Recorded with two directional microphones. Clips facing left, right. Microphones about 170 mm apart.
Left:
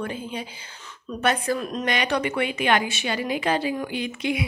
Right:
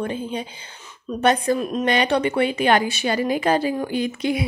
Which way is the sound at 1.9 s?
30° right (ahead or behind).